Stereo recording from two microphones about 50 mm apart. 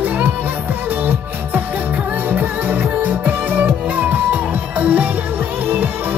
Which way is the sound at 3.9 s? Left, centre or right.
Right.